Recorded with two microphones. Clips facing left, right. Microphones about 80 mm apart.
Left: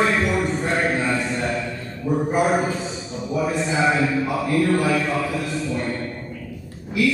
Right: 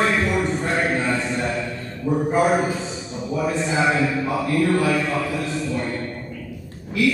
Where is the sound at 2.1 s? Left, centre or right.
Centre.